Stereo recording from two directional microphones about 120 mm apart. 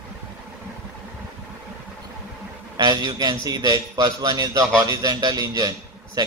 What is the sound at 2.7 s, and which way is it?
A man's voice, 35° right (ahead or behind).